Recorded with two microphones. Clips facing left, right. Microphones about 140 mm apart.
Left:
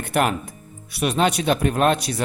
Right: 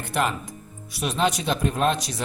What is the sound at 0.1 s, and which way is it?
A man's voice, 60° left (ahead or behind).